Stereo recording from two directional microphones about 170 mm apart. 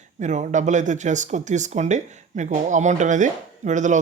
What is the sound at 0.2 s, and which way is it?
Speech, 45° right (ahead or behind).